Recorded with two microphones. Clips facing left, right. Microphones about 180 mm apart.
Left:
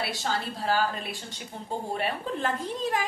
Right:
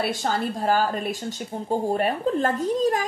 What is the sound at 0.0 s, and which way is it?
A woman's voice, 50° right (ahead or behind).